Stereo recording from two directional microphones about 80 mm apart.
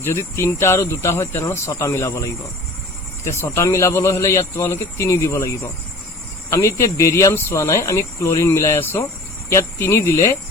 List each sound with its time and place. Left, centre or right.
0.0 s a man's voice: left
3.2 s a man's voice: left